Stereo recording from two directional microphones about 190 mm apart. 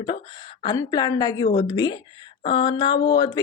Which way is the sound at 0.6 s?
20° left (ahead or behind).